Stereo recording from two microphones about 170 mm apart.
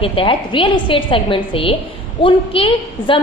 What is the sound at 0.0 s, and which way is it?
A woman's voice, 30° left (ahead or behind).